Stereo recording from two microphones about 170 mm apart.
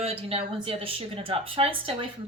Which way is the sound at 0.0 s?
35° right (ahead or behind).